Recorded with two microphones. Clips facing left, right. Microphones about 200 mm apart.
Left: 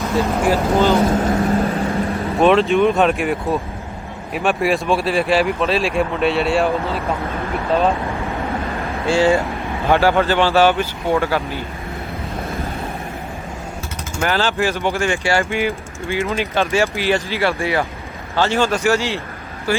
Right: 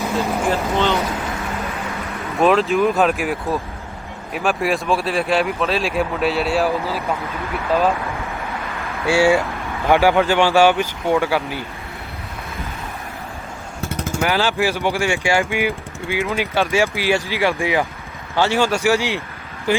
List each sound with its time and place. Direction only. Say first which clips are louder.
0.0 s speech: left 3 dB; 5° left (ahead or behind)
1.0 s vehicle: left 9 dB; 45° left (ahead or behind)
2.4 s speech: left 2 dB; centre (ahead or behind)
9.0 s speech: even; 10° right (ahead or behind)
14.2 s speech: left 1 dB; 10° right (ahead or behind)